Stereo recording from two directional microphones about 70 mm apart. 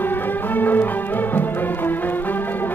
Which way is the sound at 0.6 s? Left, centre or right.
Left.